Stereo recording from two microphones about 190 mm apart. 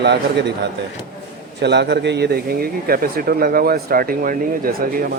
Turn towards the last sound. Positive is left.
turn(degrees=-50)  # may be behind; listen again after turning